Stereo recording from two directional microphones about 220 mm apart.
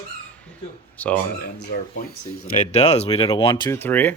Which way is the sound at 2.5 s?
30° left (ahead or behind).